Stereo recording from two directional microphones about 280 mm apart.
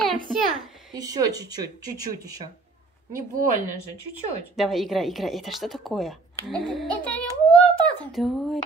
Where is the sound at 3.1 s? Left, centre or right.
Right.